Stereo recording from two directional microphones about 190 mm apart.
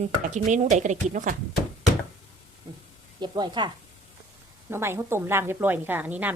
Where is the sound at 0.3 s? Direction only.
40° right (ahead or behind).